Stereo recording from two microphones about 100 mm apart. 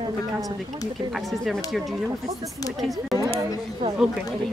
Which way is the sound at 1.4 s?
Centre (ahead or behind).